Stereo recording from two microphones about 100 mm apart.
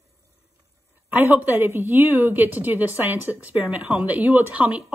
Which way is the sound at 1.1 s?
15° right (ahead or behind).